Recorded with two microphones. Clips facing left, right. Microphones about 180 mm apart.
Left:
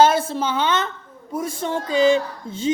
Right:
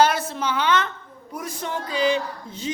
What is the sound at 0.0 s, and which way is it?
A woman's voice, 25° left (ahead or behind).